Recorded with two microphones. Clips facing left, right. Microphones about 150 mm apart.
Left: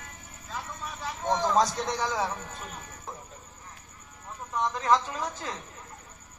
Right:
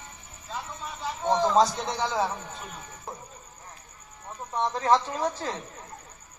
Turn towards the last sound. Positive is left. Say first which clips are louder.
# right 5 dB
turn(degrees=-35)  # may be behind; listen again after turning